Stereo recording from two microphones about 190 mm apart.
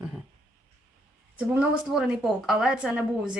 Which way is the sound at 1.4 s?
5° right (ahead or behind).